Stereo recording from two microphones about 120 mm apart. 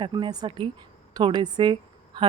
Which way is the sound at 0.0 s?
40° right (ahead or behind).